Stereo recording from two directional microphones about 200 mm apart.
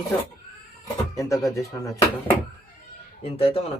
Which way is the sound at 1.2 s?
15° left (ahead or behind).